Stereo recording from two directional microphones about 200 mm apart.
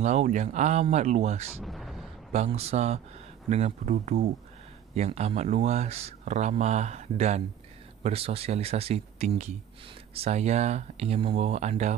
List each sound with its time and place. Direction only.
0.0 s speech: 35° right (ahead or behind)
1.6 s a sound: centre (ahead or behind)
2.3 s speech: 30° right (ahead or behind)